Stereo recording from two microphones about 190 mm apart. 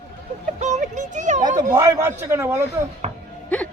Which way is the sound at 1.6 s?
15° right (ahead or behind).